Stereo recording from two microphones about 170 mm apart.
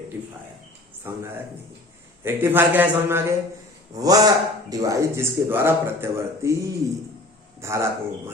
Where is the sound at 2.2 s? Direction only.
10° right (ahead or behind).